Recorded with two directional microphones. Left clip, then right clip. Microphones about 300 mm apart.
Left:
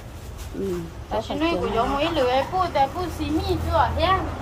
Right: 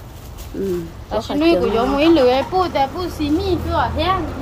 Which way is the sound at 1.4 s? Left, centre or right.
Right.